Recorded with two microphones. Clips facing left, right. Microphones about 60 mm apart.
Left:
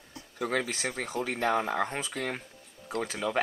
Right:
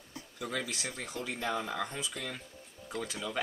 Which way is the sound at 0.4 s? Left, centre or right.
Left.